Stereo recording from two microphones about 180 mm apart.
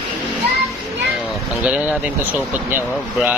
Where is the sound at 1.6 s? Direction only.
10° right (ahead or behind).